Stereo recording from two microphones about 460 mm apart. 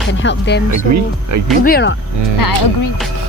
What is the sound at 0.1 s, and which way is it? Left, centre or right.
Speech, left.